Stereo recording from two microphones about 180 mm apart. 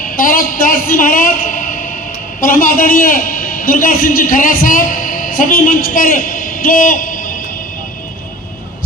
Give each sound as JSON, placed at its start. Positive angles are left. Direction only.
{"t": 0.0, "sound": "a man's voice", "side_deg": 50}